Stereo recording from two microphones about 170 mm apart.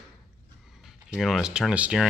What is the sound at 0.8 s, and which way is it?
Speech, centre (ahead or behind).